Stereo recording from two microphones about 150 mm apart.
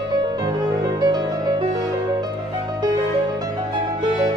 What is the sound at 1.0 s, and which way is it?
Music, 30° right (ahead or behind).